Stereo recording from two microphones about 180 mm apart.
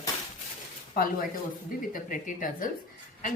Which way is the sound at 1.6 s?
50° left (ahead or behind).